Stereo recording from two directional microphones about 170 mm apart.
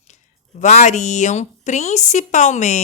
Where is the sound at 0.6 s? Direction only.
45° left (ahead or behind).